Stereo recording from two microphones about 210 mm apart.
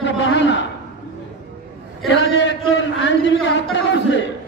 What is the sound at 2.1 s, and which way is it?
A man's voice, 55° left (ahead or behind).